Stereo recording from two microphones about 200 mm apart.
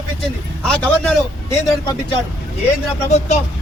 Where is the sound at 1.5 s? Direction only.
20° left (ahead or behind).